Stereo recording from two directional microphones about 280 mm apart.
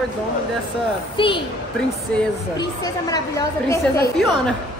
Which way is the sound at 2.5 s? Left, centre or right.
Centre.